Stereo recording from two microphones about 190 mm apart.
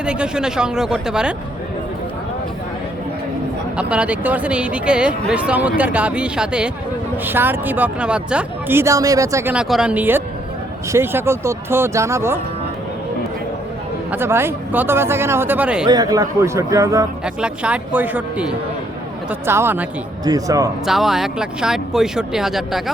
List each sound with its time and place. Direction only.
0.0 s speech: 5° right (ahead or behind)
3.8 s speech: 5° right (ahead or behind)
14.1 s speech: 10° right (ahead or behind)
15.9 s speech: 20° right (ahead or behind)
17.2 s speech: 5° right (ahead or behind)
20.8 s speech: centre (ahead or behind)